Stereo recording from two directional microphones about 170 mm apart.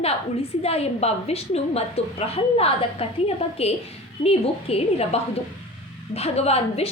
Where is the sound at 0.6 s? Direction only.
35° left (ahead or behind).